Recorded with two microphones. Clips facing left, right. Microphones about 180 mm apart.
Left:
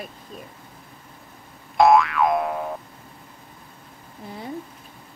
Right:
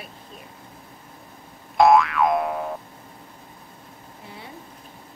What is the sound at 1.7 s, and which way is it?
Boing, centre (ahead or behind).